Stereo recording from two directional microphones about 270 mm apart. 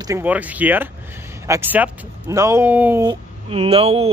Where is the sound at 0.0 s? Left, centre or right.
Centre.